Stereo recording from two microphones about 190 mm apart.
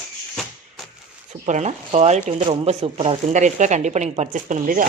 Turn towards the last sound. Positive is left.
turn(degrees=-40)  # may be behind; listen again after turning